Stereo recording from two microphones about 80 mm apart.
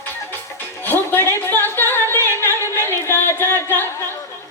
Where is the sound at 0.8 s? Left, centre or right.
Left.